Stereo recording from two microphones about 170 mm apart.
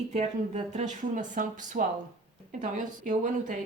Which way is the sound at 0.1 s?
45° right (ahead or behind).